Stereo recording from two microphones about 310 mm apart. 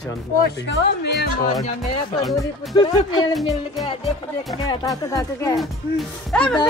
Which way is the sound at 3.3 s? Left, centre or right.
Centre.